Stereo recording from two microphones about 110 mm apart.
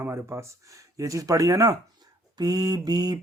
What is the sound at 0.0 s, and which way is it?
Speech, 25° right (ahead or behind).